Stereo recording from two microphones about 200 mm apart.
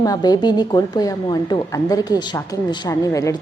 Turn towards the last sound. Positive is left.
turn(degrees=15)  # may be behind; listen again after turning